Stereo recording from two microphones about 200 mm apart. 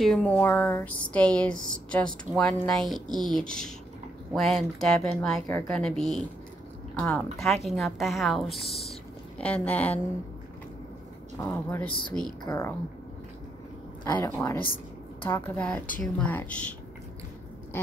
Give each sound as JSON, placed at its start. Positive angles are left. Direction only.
{"t": 0.0, "sound": "speech", "side_deg": 5}
{"t": 11.3, "sound": "speech", "side_deg": 15}
{"t": 12.4, "sound": "speech", "side_deg": 15}
{"t": 14.0, "sound": "speech", "side_deg": 20}